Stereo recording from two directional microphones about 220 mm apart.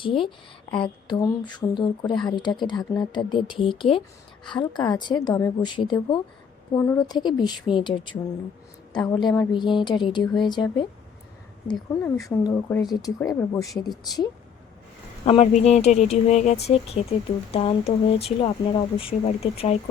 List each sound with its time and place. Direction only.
0.0 s speech: 25° left (ahead or behind)
6.7 s speech: 10° left (ahead or behind)
12.0 s speech: 10° left (ahead or behind)
15.2 s speech: 25° left (ahead or behind)